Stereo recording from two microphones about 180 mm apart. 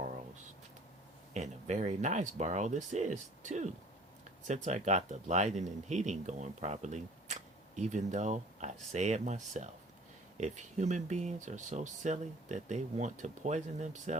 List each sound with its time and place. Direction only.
1.3 s speech: 40° right (ahead or behind)